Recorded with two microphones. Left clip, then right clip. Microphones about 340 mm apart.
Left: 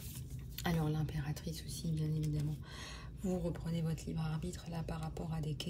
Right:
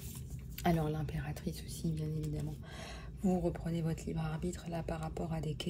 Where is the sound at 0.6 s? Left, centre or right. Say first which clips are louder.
Right 4 dB; centre.